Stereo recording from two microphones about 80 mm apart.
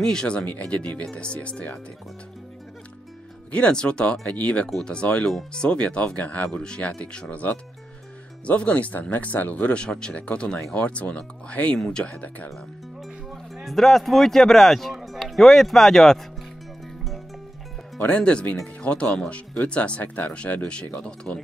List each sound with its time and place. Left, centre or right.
0.0 s speech: centre
3.5 s speech: centre
13.3 s speech: centre
17.9 s speech: centre